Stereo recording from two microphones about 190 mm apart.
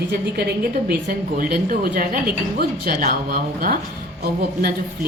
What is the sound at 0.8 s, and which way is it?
A woman's voice, 45° right (ahead or behind).